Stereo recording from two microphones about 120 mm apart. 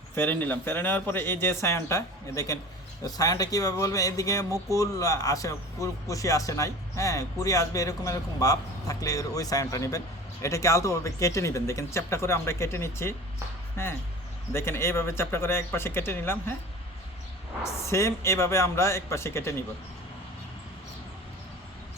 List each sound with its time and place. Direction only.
0.2 s speech: 15° left (ahead or behind)
17.6 s speech: 25° left (ahead or behind)